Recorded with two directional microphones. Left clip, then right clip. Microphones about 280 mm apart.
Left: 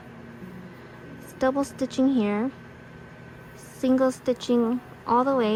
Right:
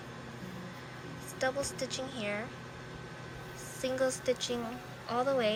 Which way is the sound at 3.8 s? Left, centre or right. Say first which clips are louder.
Left 9 dB; centre.